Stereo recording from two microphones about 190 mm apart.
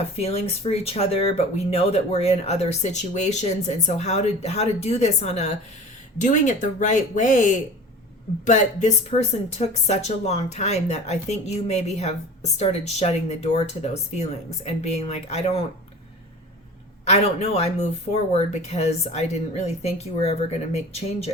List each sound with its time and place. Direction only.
0.2 s speech: 35° left (ahead or behind)
17.1 s speech: 35° left (ahead or behind)